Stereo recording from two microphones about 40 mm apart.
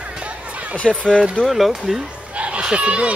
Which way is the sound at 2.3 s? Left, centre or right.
Right.